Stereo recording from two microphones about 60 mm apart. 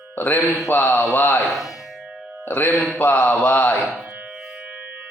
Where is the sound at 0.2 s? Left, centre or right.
Left.